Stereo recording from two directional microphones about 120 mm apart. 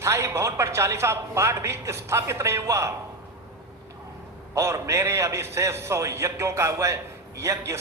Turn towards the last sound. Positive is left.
turn(degrees=-25)  # may be behind; listen again after turning